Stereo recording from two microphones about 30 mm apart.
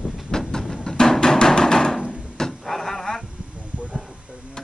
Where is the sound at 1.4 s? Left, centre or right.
Left.